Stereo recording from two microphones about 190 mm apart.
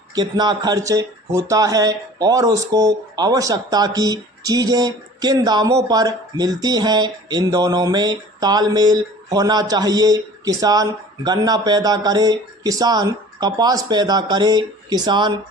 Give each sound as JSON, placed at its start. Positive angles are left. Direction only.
{"t": 0.1, "sound": "speech", "side_deg": -20}